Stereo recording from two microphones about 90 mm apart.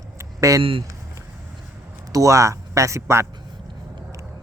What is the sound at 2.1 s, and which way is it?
Speech, 35° right (ahead or behind).